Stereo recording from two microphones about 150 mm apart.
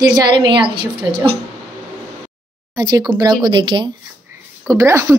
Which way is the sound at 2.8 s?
25° right (ahead or behind).